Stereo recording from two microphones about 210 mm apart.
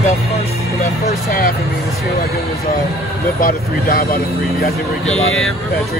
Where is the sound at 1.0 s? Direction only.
45° left (ahead or behind).